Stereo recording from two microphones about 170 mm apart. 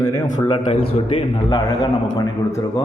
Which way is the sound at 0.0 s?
25° left (ahead or behind).